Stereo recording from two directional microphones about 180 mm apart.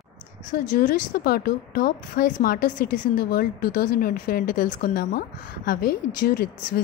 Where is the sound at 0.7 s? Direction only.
45° left (ahead or behind).